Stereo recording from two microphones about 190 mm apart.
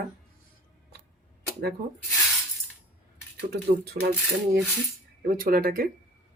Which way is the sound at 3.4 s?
55° right (ahead or behind).